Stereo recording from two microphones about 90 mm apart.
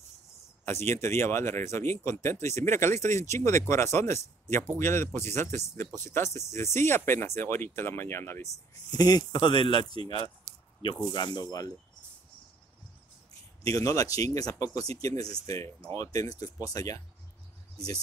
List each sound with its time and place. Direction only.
0.7 s speech: 30° left (ahead or behind)
8.9 s speech: 50° left (ahead or behind)
13.7 s speech: 40° left (ahead or behind)